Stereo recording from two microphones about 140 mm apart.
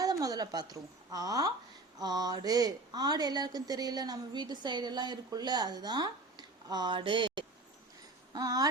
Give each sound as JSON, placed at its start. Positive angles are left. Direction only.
{"t": 0.0, "sound": "a woman's voice", "side_deg": -25}